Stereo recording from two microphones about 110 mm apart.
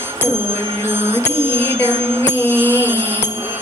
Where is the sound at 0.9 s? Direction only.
20° right (ahead or behind).